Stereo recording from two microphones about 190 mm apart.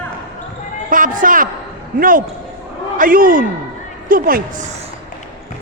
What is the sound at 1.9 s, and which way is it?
Speech, 45° right (ahead or behind).